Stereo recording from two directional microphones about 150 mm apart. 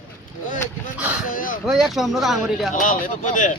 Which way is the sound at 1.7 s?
Centre (ahead or behind).